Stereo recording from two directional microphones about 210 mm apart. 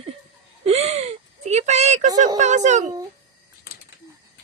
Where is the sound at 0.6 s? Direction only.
30° right (ahead or behind).